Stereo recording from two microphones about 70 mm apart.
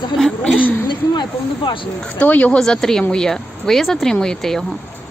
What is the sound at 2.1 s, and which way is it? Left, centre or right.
Speech, left.